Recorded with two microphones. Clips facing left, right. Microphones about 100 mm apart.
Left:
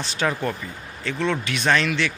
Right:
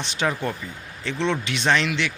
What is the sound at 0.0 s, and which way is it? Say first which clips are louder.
A man's voice: left 1 dB; 20° right (ahead or behind).